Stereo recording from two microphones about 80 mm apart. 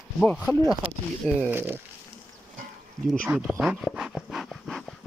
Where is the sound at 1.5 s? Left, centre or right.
Right.